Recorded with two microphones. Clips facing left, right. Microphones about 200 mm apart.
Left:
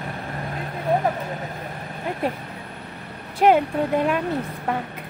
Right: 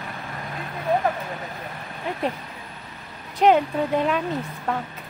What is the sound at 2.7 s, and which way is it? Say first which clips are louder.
Vehicle: left 4 dB; 60° left (ahead or behind).